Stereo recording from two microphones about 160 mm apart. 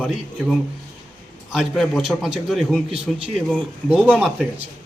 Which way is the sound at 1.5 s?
Centre (ahead or behind).